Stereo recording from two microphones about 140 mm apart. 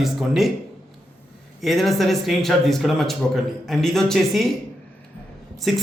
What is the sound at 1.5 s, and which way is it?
Speech, centre (ahead or behind).